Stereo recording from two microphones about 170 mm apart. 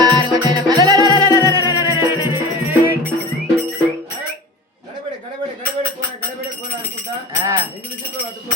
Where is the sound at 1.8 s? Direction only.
20° right (ahead or behind).